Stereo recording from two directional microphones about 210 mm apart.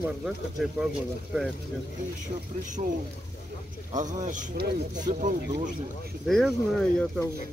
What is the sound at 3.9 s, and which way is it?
Speech, 35° right (ahead or behind).